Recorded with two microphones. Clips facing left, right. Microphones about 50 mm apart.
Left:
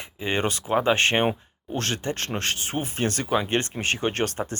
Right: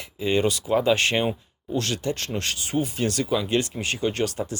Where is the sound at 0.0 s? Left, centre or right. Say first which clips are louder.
Right 3 dB; left.